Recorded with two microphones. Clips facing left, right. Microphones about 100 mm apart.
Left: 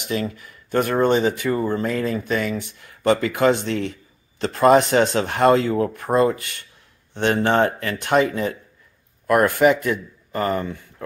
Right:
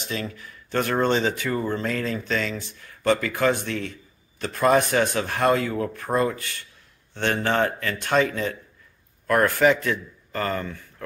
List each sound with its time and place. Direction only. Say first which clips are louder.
0.0 s speech: left 6 dB; 20° left (ahead or behind)